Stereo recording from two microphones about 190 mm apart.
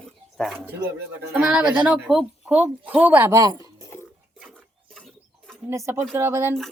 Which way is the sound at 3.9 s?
10° left (ahead or behind).